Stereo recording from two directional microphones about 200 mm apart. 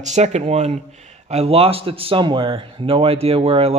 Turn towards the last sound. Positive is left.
turn(degrees=-30)  # may be behind; listen again after turning